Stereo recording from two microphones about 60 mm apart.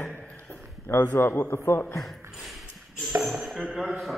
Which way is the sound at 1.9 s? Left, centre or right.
Centre.